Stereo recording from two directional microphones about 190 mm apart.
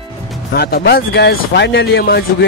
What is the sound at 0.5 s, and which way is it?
Speech, 55° left (ahead or behind).